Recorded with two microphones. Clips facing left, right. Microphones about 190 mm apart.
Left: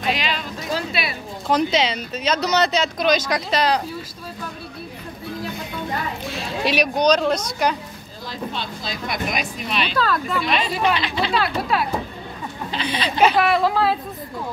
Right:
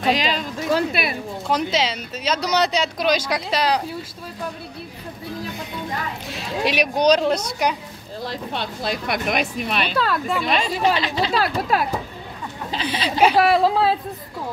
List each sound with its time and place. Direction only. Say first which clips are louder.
0.0 s a sound: right 4 dB; 40° right (ahead or behind)
0.7 s speech: right 5 dB; 55° right (ahead or behind)
1.5 s speech: left 3 dB; 5° right (ahead or behind)
6.6 s speech: even; 15° right (ahead or behind)
8.3 s speech: left 1 dB; 65° right (ahead or behind)
9.9 s speech: left 1 dB; 20° right (ahead or behind)
10.4 s a child's voice: right 2 dB; 40° right (ahead or behind)
12.8 s speech: even; 5° right (ahead or behind)
13.4 s a child's voice: right 2 dB; 30° right (ahead or behind)